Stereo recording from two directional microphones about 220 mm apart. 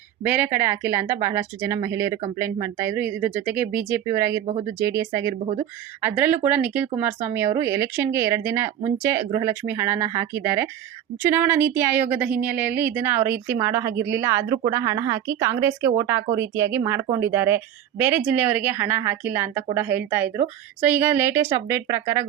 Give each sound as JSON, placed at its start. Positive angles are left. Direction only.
{"t": 0.2, "sound": "a woman's voice", "side_deg": -10}